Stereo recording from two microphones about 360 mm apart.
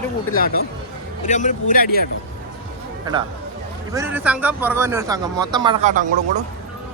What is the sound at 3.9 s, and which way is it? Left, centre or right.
Speech, centre.